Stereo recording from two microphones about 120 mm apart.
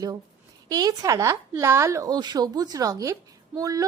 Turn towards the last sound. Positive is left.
turn(degrees=-30)  # may be behind; listen again after turning